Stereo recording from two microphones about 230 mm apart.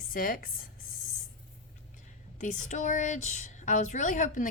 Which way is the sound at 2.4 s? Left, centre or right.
Left.